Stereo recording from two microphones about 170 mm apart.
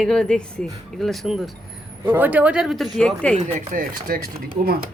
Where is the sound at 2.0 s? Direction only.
10° right (ahead or behind); by 3.4 s 5° left (ahead or behind).